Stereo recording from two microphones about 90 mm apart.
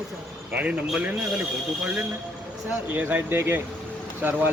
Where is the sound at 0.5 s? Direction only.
15° right (ahead or behind).